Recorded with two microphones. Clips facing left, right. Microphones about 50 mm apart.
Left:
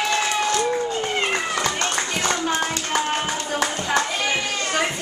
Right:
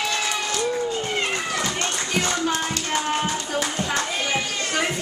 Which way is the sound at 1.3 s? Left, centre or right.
Centre.